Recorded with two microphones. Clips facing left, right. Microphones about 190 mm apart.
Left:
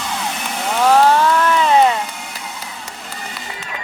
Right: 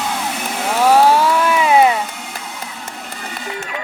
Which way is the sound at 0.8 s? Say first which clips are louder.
Right 1 dB; 10° right (ahead or behind).